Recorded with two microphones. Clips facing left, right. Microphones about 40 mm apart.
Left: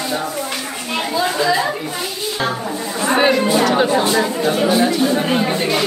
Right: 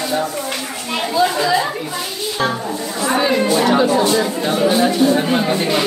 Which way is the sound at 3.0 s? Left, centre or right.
Left.